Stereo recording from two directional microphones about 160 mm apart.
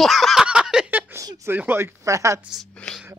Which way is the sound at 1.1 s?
20° right (ahead or behind).